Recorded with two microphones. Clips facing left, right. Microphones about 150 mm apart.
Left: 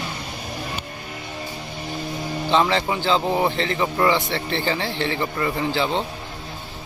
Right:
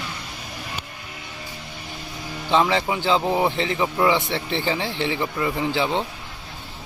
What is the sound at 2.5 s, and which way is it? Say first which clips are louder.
Speech: even; 10° right (ahead or behind).